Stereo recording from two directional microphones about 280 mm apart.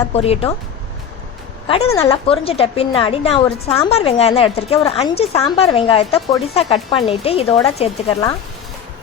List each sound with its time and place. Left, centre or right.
0.1 s a woman's voice: left
1.6 s a woman's voice: centre